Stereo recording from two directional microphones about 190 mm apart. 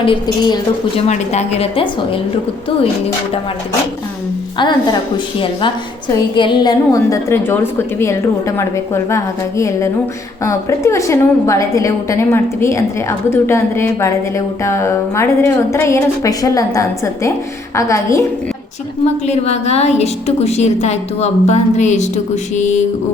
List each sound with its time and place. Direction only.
0.0 s a woman's voice: 25° left (ahead or behind)
1.0 s a woman's voice: 35° left (ahead or behind)
4.5 s a woman's voice: 25° left (ahead or behind)
19.0 s a woman's voice: 35° left (ahead or behind)